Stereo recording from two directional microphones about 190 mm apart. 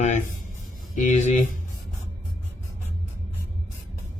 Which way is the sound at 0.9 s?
40° left (ahead or behind).